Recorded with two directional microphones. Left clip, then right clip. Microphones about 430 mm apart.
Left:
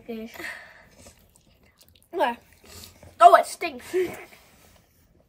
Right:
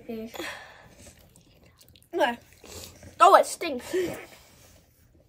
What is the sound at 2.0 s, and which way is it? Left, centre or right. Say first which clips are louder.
Speech: left 1 dB; centre.